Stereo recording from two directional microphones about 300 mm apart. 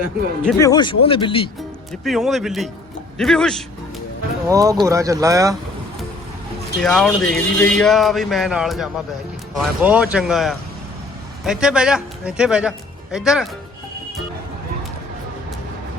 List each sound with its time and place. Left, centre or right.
0.4 s speech: centre
1.9 s speech: centre
4.4 s speech: centre
6.7 s speech: centre